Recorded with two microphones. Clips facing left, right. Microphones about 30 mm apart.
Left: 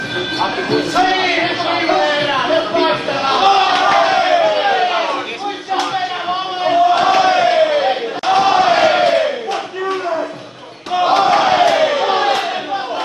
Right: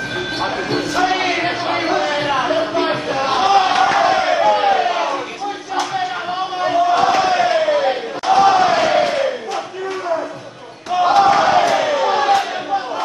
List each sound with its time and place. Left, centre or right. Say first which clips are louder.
0.4 s music: left 4 dB; left
2.8 s a sound: left 3 dB; left
6.6 s battle cry: left 2 dB; left
11.2 s crowd: left 1 dB; left